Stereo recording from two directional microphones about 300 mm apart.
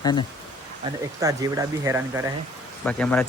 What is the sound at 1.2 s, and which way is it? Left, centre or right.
Speech, centre.